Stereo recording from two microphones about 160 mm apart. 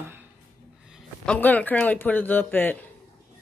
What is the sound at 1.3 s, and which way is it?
Speech, 10° left (ahead or behind).